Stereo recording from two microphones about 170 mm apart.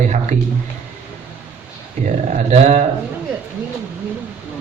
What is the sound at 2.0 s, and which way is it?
Speech, 40° right (ahead or behind).